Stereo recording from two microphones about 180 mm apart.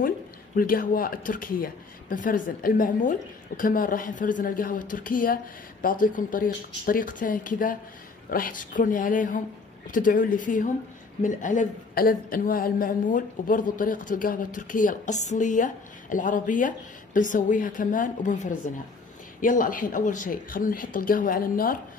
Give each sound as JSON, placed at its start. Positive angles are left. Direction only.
{"t": 0.6, "sound": "a woman's voice", "side_deg": 50}